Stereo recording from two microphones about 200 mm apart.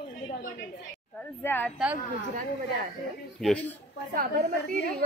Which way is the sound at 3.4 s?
5° left (ahead or behind).